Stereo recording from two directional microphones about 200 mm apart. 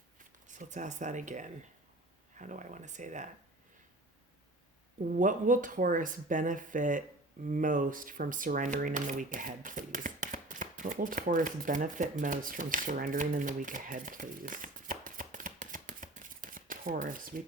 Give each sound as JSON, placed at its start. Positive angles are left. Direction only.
{"t": 0.4, "sound": "speech", "side_deg": -40}
{"t": 5.1, "sound": "speech", "side_deg": -40}